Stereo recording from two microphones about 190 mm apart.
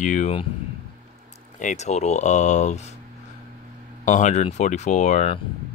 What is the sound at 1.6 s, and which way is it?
Speech, 40° left (ahead or behind).